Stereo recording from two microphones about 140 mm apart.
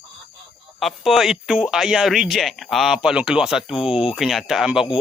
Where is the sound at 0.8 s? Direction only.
Centre (ahead or behind).